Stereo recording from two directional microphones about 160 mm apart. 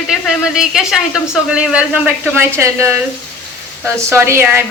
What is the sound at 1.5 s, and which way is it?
Speech, 5° right (ahead or behind).